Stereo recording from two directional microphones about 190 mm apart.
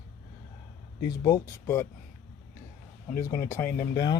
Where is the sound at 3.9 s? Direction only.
20° left (ahead or behind).